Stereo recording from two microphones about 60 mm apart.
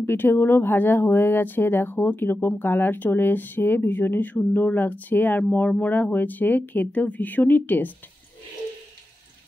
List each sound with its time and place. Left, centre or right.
0.0 s speech: left